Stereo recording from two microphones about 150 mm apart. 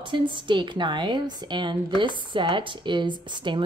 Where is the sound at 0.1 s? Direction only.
30° right (ahead or behind).